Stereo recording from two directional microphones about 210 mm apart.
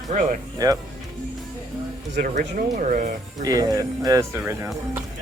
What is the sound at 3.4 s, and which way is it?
Speech, 15° right (ahead or behind).